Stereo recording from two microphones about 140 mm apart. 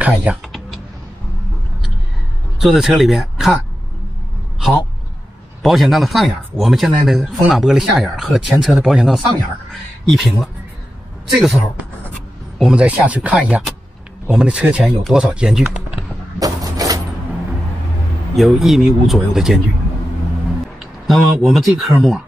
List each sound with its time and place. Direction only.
0.0 s speech: 10° right (ahead or behind)
2.6 s speech: centre (ahead or behind)
4.6 s vehicle: centre (ahead or behind)
5.6 s speech: centre (ahead or behind)
16.3 s a sound: 25° right (ahead or behind)
18.3 s speech: centre (ahead or behind)
20.8 s speech: centre (ahead or behind)